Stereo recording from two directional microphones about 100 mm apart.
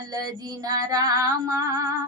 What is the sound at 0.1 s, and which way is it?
Speech, 40° right (ahead or behind).